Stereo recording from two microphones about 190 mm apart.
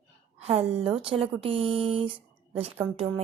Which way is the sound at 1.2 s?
30° right (ahead or behind).